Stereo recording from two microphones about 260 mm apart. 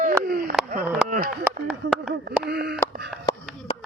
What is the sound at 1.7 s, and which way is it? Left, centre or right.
Speech, centre.